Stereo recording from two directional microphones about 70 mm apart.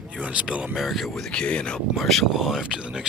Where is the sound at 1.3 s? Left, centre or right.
Centre.